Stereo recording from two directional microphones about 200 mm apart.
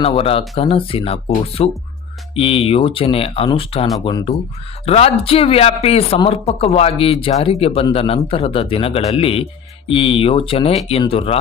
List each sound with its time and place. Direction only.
0.0 s speech: 30° left (ahead or behind)